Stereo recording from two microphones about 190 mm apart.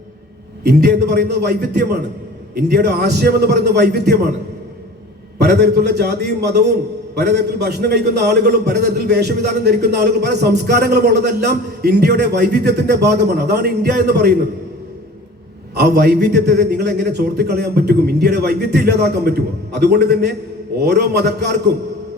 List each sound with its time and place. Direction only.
0.6 s a man's voice: 60° right (ahead or behind)
5.4 s a man's voice: 60° right (ahead or behind)
15.7 s a man's voice: 60° right (ahead or behind)